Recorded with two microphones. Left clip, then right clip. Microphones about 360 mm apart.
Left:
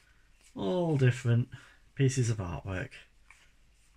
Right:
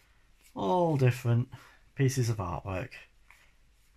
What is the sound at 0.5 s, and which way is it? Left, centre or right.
Speech, centre.